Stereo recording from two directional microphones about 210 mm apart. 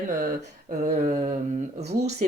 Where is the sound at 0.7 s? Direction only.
35° right (ahead or behind).